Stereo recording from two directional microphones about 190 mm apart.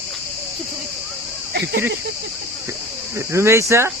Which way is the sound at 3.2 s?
15° right (ahead or behind).